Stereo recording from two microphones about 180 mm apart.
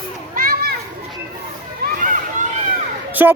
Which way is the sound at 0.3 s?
55° right (ahead or behind).